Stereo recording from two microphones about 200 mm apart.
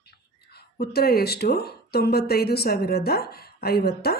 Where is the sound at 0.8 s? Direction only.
50° left (ahead or behind).